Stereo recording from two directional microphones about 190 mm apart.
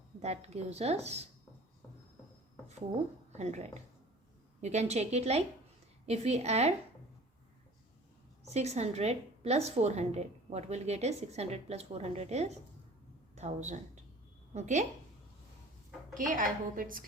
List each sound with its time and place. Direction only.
0.2 s a woman's voice: 35° right (ahead or behind)
3.3 s a woman's voice: 35° right (ahead or behind)
8.4 s a woman's voice: 35° right (ahead or behind)
16.1 s a woman's voice: 45° right (ahead or behind)